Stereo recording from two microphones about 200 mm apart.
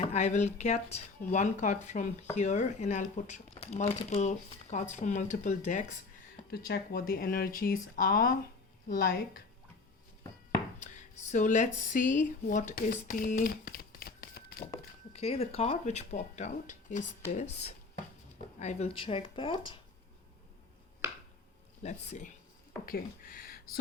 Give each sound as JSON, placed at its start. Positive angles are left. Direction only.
{"t": 0.0, "sound": "speech", "side_deg": 35}
{"t": 6.5, "sound": "speech", "side_deg": 50}
{"t": 10.8, "sound": "speech", "side_deg": 35}
{"t": 15.1, "sound": "speech", "side_deg": 30}
{"t": 21.0, "sound": "a sound", "side_deg": -15}
{"t": 21.8, "sound": "speech", "side_deg": 35}
{"t": 22.9, "sound": "speech", "side_deg": 45}